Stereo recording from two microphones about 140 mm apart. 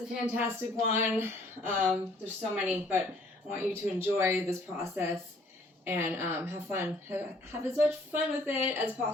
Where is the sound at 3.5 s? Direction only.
15° right (ahead or behind).